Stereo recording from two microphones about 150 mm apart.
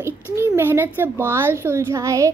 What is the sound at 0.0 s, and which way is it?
Speech, 15° right (ahead or behind).